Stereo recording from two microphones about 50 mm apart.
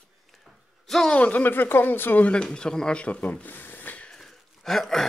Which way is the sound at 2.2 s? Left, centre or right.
Centre.